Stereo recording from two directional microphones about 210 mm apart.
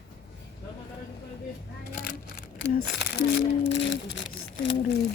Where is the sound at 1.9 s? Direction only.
40° left (ahead or behind).